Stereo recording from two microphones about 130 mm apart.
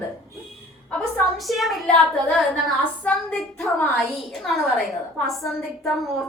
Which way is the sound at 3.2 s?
15° left (ahead or behind).